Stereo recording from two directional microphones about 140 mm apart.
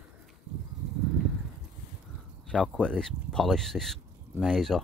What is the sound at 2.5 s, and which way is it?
Speech, 5° left (ahead or behind).